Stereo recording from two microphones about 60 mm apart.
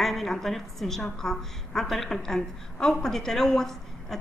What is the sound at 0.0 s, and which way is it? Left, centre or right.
A woman's voice, centre.